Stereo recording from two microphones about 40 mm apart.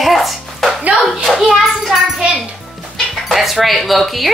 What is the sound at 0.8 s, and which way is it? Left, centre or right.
Speech, right.